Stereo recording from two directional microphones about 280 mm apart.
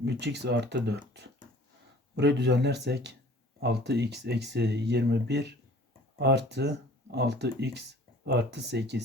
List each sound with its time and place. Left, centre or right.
0.0 s speech: right